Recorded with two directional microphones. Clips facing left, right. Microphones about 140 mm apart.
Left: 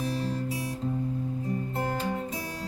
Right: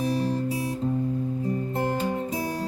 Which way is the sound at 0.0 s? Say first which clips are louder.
Right 5 dB; 15° right (ahead or behind).